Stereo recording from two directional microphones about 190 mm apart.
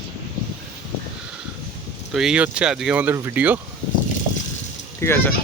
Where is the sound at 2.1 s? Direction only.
5° right (ahead or behind).